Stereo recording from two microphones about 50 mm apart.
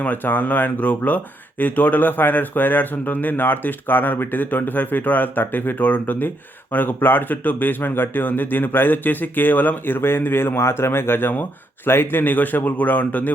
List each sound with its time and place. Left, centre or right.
0.0 s speech: left